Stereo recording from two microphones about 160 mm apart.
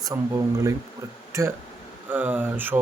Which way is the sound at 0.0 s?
20° right (ahead or behind).